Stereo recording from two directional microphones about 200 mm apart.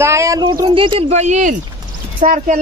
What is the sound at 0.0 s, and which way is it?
Speech, 15° right (ahead or behind).